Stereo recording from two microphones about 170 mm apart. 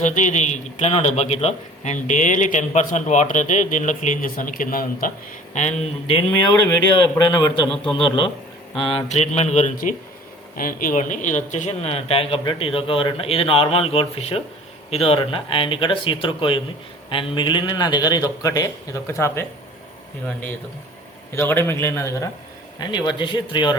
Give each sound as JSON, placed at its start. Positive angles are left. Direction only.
{"t": 0.0, "sound": "a man's voice", "side_deg": 45}
{"t": 5.5, "sound": "speech", "side_deg": 40}
{"t": 7.3, "sound": "a man's voice", "side_deg": 25}
{"t": 8.8, "sound": "a man's voice", "side_deg": 35}
{"t": 21.3, "sound": "a man's voice", "side_deg": 15}